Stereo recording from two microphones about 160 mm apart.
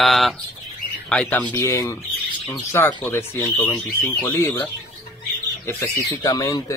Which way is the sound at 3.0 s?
15° left (ahead or behind).